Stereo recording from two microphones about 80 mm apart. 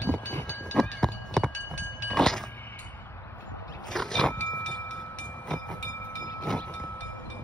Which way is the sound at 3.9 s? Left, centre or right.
Centre.